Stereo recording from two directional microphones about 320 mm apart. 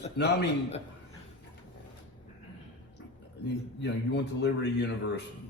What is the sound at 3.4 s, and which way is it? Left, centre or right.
A man's voice, left.